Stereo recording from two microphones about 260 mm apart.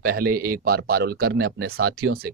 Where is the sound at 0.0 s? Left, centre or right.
Right.